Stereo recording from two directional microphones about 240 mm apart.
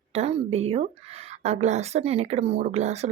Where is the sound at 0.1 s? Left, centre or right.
Right.